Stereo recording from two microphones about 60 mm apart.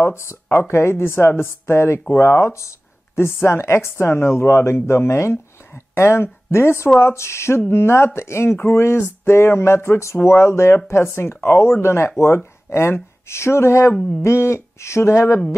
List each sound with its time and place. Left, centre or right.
0.0 s a woman's voice: left
13.9 s a sound: centre
14.2 s a woman's voice: left